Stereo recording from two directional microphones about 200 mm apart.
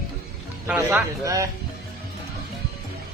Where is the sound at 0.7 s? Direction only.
10° right (ahead or behind).